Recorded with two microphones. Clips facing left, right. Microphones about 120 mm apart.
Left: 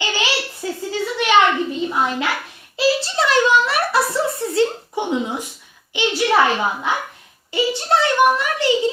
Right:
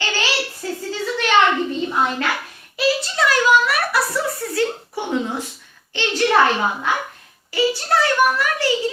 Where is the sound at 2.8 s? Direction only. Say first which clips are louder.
Left 1 dB; 25° left (ahead or behind).